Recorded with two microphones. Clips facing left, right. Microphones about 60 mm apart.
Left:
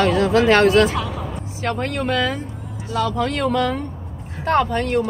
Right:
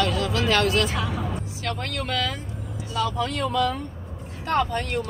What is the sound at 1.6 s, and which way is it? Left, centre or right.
Speech, left.